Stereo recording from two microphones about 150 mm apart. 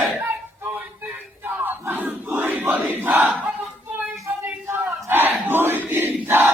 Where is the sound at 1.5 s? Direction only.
15° right (ahead or behind).